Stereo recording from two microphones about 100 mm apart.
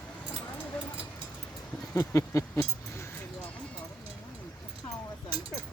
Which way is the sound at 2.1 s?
30° left (ahead or behind).